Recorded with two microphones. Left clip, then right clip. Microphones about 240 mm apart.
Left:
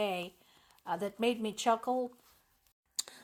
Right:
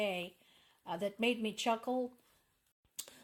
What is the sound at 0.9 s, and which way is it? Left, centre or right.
A woman's voice, left.